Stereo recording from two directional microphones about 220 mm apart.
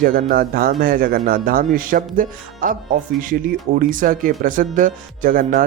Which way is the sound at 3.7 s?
40° right (ahead or behind).